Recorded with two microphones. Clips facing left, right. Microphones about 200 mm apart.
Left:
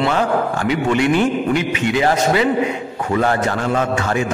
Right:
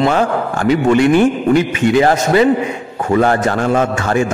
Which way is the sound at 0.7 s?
50° right (ahead or behind).